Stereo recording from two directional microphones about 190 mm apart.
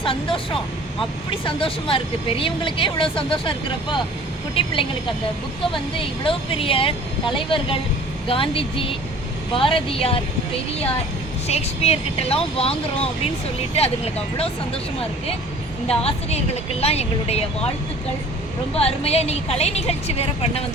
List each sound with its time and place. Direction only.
0.0 s a woman's voice: 30° left (ahead or behind)
6.0 s a woman's voice: 30° left (ahead or behind)
8.3 s a woman's voice: 30° left (ahead or behind)
11.4 s a woman's voice: 35° left (ahead or behind)
15.9 s a woman's voice: 30° left (ahead or behind)
18.8 s a woman's voice: 30° left (ahead or behind)